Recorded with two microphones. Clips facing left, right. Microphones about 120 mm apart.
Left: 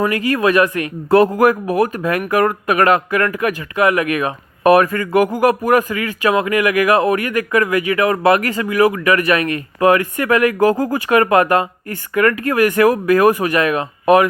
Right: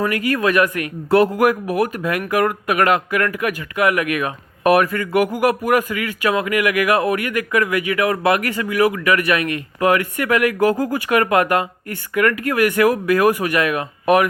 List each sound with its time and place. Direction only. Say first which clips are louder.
0.1 s speech: left 3 dB; 35° left (ahead or behind)